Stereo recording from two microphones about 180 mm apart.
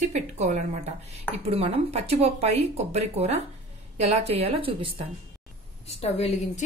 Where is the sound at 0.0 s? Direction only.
40° right (ahead or behind).